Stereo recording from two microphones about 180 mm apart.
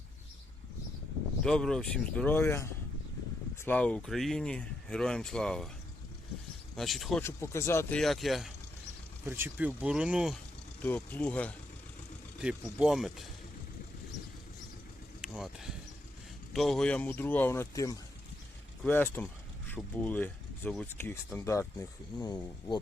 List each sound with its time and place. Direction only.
1.5 s speech: 5° left (ahead or behind)
6.7 s speech: centre (ahead or behind)
7.2 s speech: 15° left (ahead or behind)
7.9 s speech: centre (ahead or behind)
9.2 s speech: 10° right (ahead or behind)
10.8 s speech: 10° left (ahead or behind)
12.4 s speech: 5° right (ahead or behind)
15.2 s a sound: 5° right (ahead or behind)
16.5 s speech: centre (ahead or behind); by 22.8 s 20° left (ahead or behind)